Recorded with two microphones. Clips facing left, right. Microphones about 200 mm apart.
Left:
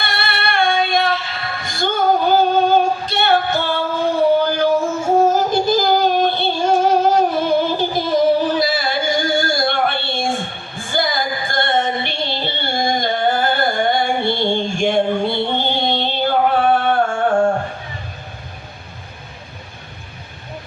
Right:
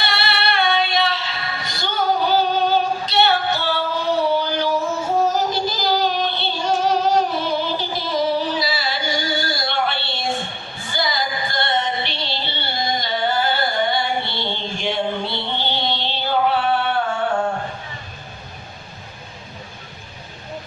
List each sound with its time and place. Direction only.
0.0 s female singing: 50° left (ahead or behind)
5.2 s child singing: 50° left (ahead or behind)
10.9 s music: 50° left (ahead or behind)